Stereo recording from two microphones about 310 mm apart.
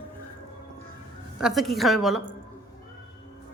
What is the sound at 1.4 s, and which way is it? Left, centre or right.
Speech, centre.